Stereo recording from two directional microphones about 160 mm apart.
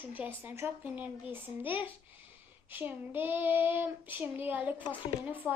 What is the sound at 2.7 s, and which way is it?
Child singing, 10° right (ahead or behind).